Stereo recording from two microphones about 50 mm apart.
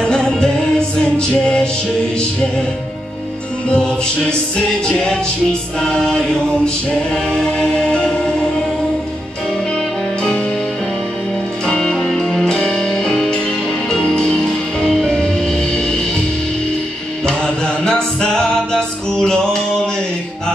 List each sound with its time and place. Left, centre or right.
0.0 s music: centre
3.6 s music: centre
11.6 s music: centre
12.0 s music: centre
17.3 s music: centre